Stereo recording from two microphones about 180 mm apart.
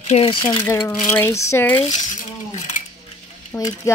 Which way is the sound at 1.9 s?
45° left (ahead or behind).